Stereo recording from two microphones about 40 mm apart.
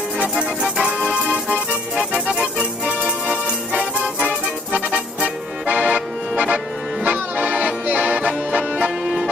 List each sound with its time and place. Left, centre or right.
0.4 s music: centre
1.0 s accordion: right
2.0 s music: centre
2.8 s music: right
3.1 s music: right
4.8 s accordion: right
8.5 s music: right